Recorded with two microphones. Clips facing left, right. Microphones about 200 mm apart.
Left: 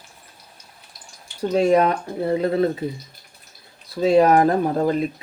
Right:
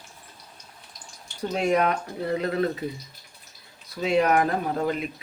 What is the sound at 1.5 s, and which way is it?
Speech, 35° left (ahead or behind).